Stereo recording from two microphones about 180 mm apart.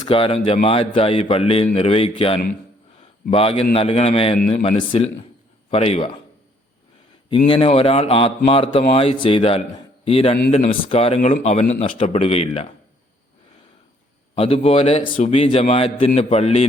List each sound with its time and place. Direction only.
0.1 s a man's voice: 30° left (ahead or behind)
3.0 s a sound: 35° left (ahead or behind)
3.8 s a man's voice: 35° left (ahead or behind)
7.3 s a man's voice: 30° left (ahead or behind)
14.3 s a man's voice: 35° left (ahead or behind)